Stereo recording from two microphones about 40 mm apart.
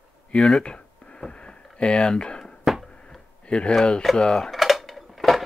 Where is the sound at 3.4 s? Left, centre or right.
Left.